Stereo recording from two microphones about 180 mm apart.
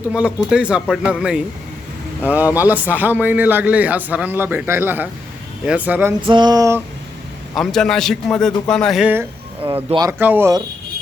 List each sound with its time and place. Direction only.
0.1 s a man's voice: 5° right (ahead or behind)
6.2 s a sound: 25° right (ahead or behind)
7.5 s a man's voice: centre (ahead or behind)